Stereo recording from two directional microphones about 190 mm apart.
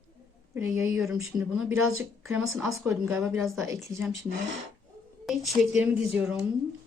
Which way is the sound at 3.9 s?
20° right (ahead or behind).